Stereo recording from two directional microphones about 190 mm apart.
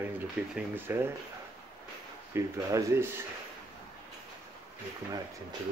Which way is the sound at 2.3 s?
15° right (ahead or behind).